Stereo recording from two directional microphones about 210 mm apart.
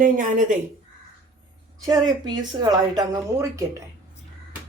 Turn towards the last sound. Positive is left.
turn(degrees=-15)  # may be behind; listen again after turning